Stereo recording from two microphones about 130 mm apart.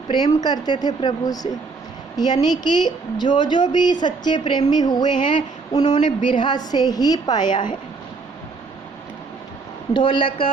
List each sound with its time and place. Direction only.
0.1 s speech: 35° left (ahead or behind)
9.9 s speech: 35° left (ahead or behind)